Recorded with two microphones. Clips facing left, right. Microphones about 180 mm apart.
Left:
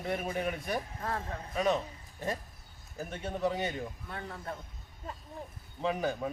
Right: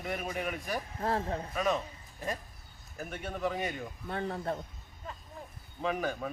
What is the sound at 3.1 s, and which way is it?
Speech, 25° left (ahead or behind).